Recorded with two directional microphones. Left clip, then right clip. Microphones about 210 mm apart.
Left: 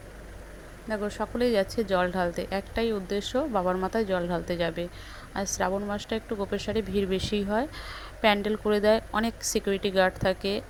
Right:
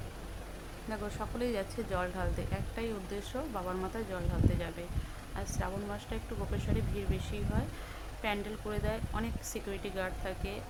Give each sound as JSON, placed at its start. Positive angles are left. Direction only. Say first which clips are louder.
{"t": 0.9, "sound": "a woman's voice", "louder": "left 9 dB", "side_deg": 25}